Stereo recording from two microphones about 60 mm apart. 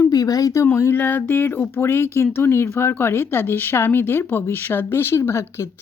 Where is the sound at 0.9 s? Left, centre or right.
Left.